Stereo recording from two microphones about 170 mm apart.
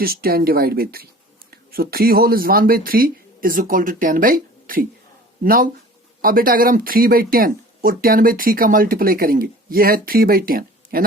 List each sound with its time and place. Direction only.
0.0 s speech: 60° right (ahead or behind)